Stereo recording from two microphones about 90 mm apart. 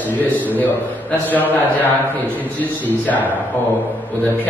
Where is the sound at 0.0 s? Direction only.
20° left (ahead or behind).